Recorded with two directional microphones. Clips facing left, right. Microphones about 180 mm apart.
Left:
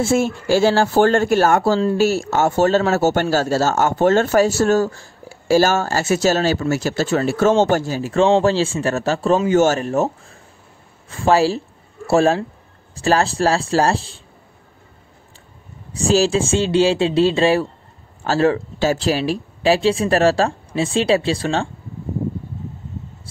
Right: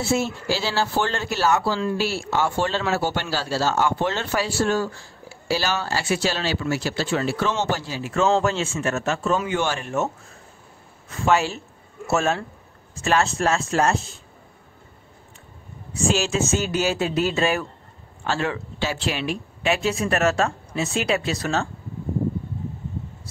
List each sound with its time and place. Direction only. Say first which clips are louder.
0.0 s a man's voice: left 5 dB; 50° left (ahead or behind)
8.1 s speech: left 5 dB; 30° left (ahead or behind)
15.9 s a man's voice: left 7 dB; 35° left (ahead or behind)